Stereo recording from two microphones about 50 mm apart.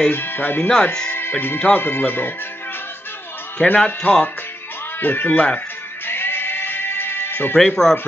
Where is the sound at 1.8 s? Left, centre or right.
Left.